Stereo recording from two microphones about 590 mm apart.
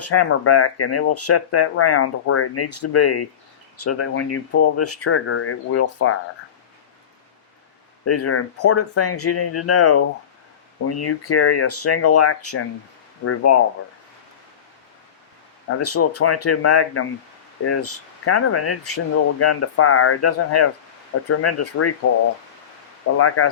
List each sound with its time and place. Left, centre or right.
0.0 s speech: left
8.0 s speech: left
15.7 s speech: left
23.1 s speech: left